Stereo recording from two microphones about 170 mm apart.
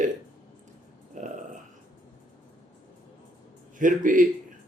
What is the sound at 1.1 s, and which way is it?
Speech, 45° right (ahead or behind).